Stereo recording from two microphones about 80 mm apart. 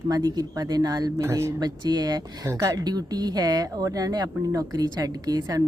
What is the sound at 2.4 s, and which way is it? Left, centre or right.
Speech, right.